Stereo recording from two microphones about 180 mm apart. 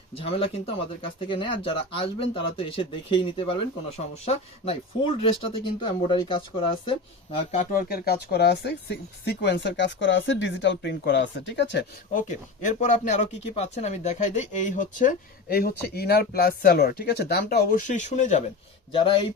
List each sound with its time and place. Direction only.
0.1 s speech: 30° left (ahead or behind)
7.5 s speech: 45° left (ahead or behind); by 11.9 s 75° left (ahead or behind)
12.1 s speech: 45° left (ahead or behind)
18.9 s speech: 30° left (ahead or behind)